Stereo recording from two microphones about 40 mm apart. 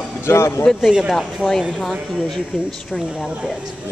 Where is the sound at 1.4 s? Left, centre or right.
Right.